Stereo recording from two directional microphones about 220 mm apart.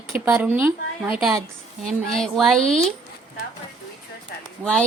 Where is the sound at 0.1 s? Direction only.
10° right (ahead or behind).